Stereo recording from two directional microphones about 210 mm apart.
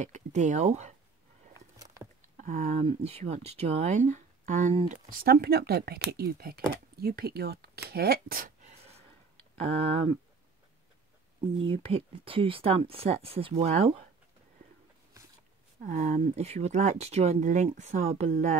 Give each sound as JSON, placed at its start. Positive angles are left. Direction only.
{"t": 0.0, "sound": "speech", "side_deg": -35}
{"t": 2.3, "sound": "speech", "side_deg": -35}
{"t": 11.5, "sound": "speech", "side_deg": -25}
{"t": 15.8, "sound": "speech", "side_deg": -35}